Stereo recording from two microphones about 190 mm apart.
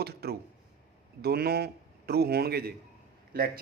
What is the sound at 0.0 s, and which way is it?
A man's voice, 55° right (ahead or behind).